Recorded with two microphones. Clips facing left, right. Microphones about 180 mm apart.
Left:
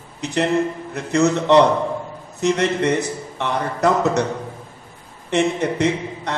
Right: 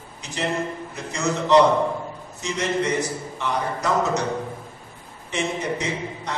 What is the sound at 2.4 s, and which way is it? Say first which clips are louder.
A man's voice: left 6 dB; 60° left (ahead or behind).